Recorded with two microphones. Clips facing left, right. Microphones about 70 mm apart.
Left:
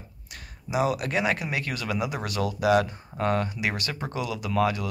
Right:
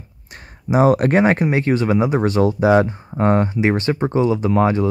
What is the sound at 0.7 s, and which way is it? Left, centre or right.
Speech, right.